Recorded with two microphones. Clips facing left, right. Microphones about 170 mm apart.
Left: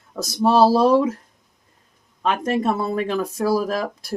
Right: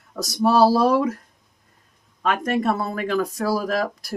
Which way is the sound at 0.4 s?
25° left (ahead or behind).